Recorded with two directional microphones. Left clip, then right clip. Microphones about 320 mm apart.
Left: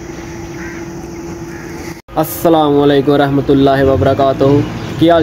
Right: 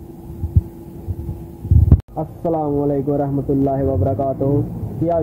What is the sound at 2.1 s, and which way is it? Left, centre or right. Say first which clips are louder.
Speech: left 12 dB; left.